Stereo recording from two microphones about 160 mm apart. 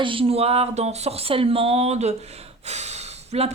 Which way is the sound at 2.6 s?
45° right (ahead or behind).